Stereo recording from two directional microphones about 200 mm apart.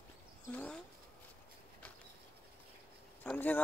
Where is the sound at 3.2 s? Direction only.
10° left (ahead or behind).